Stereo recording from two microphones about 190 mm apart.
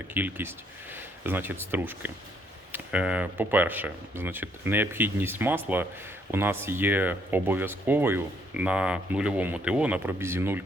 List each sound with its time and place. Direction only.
0.1 s speech: 10° right (ahead or behind)